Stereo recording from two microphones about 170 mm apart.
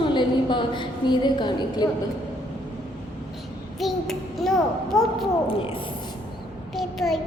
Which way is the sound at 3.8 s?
Centre (ahead or behind).